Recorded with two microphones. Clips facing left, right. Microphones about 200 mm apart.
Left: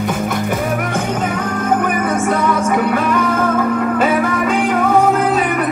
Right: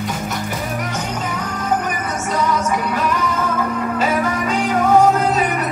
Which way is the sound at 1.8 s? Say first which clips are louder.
Left 7 dB; 55° left (ahead or behind).